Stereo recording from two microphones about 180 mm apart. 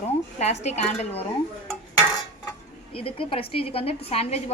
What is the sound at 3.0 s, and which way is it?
A woman's voice, 30° left (ahead or behind).